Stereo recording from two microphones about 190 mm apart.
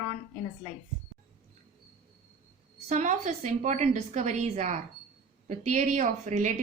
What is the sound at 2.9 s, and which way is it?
A woman's voice, 40° right (ahead or behind).